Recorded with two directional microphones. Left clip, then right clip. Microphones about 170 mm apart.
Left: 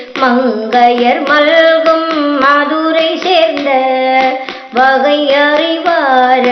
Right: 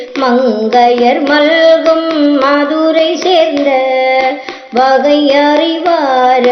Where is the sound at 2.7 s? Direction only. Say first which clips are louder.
Right 2 dB; 45° right (ahead or behind).